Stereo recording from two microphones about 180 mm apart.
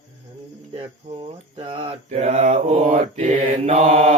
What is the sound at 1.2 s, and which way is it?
Mantra, 30° right (ahead or behind).